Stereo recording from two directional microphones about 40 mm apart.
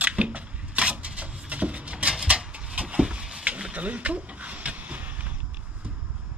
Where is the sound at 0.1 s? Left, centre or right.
Right.